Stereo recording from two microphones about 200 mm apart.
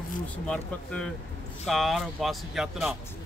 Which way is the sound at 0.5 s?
5° left (ahead or behind).